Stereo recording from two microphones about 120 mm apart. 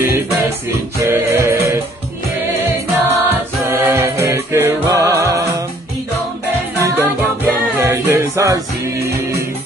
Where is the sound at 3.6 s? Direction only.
20° right (ahead or behind).